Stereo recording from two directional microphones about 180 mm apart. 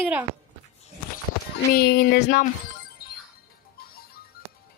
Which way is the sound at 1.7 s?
60° left (ahead or behind).